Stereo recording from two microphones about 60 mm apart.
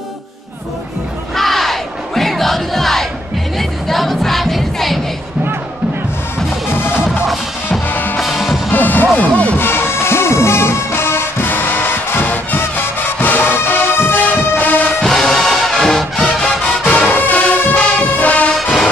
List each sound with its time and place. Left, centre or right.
1.3 s crowd: centre
3.5 s music: centre
6.9 s music: centre
7.9 s music: left
8.2 s music: centre
8.7 s music: left
9.6 s music: left
15.0 s music: centre
17.1 s music: left